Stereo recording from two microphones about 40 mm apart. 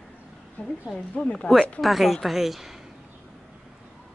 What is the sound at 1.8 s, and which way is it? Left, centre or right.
Speech, centre.